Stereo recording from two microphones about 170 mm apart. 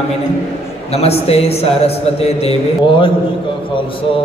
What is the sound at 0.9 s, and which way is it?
Speech, 35° left (ahead or behind).